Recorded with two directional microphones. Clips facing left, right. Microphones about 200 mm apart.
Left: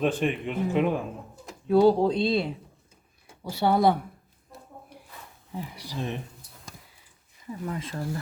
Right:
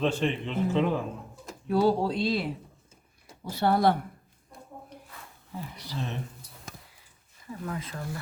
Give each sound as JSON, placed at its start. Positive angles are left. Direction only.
{"t": 0.0, "sound": "a man's voice", "side_deg": 15}
{"t": 3.6, "sound": "a man's voice", "side_deg": 15}
{"t": 5.5, "sound": "a man's voice", "side_deg": 15}
{"t": 7.6, "sound": "speech", "side_deg": 25}